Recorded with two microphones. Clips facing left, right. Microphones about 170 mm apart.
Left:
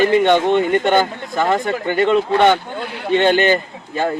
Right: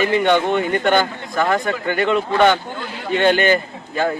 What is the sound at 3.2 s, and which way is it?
Speech, 25° left (ahead or behind).